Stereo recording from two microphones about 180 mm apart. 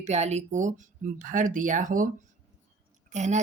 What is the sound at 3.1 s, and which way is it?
Speech, 40° right (ahead or behind).